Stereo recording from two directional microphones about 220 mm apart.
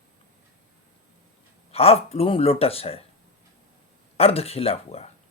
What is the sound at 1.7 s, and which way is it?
Speech, 25° left (ahead or behind).